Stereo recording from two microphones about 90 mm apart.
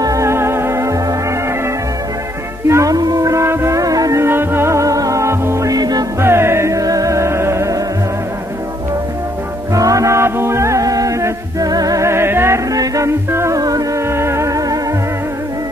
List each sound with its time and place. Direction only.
0.0 s music: 35° right (ahead or behind)
2.7 s music: 40° right (ahead or behind)
4.2 s music: 25° right (ahead or behind); by 6.0 s 45° right (ahead or behind)
6.2 s music: 30° right (ahead or behind)
9.8 s music: 40° right (ahead or behind)
12.7 s music: 40° right (ahead or behind)
13.6 s music: 45° right (ahead or behind)
14.1 s music: 30° right (ahead or behind)